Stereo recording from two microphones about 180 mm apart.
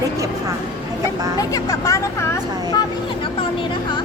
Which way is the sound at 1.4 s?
20° left (ahead or behind).